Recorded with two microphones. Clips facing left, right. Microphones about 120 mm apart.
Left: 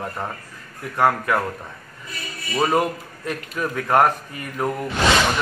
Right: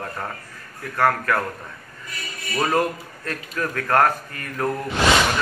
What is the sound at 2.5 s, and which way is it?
A man's voice, 15° left (ahead or behind).